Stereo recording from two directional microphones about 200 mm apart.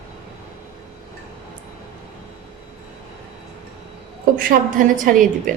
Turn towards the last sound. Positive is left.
turn(degrees=-40)  # may be behind; listen again after turning